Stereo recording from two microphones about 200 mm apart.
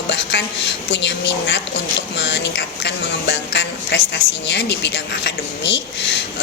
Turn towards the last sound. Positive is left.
turn(degrees=60)  # may be behind; listen again after turning